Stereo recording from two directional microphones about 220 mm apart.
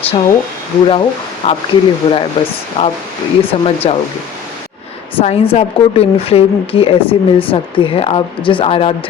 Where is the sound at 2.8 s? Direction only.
35° left (ahead or behind).